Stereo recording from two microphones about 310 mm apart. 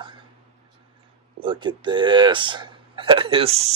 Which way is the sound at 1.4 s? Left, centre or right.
Centre.